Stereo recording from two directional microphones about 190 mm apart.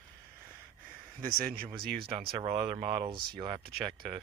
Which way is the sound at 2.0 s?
30° right (ahead or behind).